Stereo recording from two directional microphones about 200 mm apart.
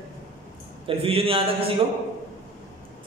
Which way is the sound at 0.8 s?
30° right (ahead or behind).